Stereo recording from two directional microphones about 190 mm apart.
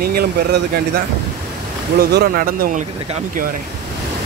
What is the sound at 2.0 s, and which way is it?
Speech, 55° right (ahead or behind).